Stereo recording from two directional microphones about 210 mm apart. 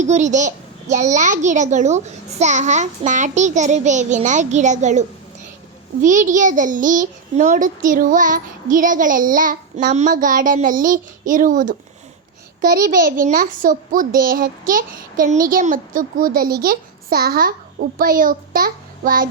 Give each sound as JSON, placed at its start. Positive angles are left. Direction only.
{"t": 0.0, "sound": "a child's voice", "side_deg": -35}